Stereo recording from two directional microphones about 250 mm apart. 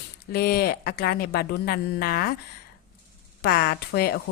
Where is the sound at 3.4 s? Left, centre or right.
Left.